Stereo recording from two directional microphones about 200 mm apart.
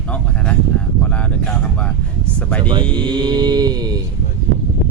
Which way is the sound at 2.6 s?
25° right (ahead or behind).